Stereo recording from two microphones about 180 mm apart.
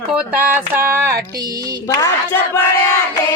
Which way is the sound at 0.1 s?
10° right (ahead or behind).